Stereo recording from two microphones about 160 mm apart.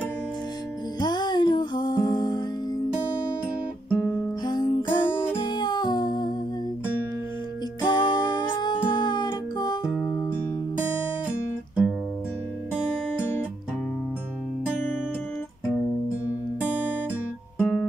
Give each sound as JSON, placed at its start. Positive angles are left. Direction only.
{"t": 0.9, "sound": "music", "side_deg": 25}
{"t": 4.5, "sound": "music", "side_deg": 25}
{"t": 5.4, "sound": "humming", "side_deg": 30}
{"t": 7.8, "sound": "music", "side_deg": 30}
{"t": 11.2, "sound": "guitar", "side_deg": -10}
{"t": 12.7, "sound": "music", "side_deg": -5}
{"t": 17.6, "sound": "guitar", "side_deg": 10}